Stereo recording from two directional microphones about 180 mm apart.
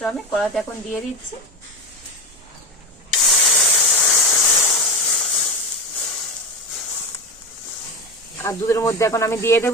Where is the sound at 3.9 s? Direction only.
15° left (ahead or behind).